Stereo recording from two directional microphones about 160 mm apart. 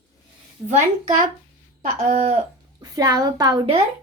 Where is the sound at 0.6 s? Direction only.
50° right (ahead or behind).